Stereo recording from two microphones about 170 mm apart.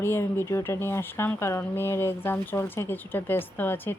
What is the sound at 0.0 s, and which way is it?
Speech, 15° left (ahead or behind).